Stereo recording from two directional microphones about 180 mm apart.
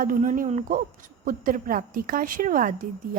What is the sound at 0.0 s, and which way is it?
A woman's voice, 45° right (ahead or behind).